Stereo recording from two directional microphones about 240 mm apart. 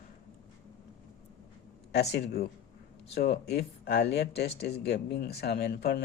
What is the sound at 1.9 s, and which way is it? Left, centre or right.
Speech, left.